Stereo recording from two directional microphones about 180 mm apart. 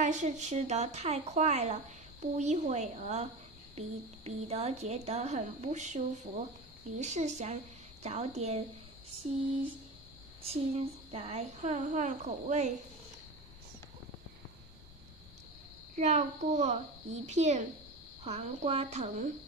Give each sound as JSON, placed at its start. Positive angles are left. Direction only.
{"t": 0.0, "sound": "a woman's voice", "side_deg": -40}
{"t": 10.4, "sound": "a woman's voice", "side_deg": -35}
{"t": 16.0, "sound": "a woman's voice", "side_deg": -40}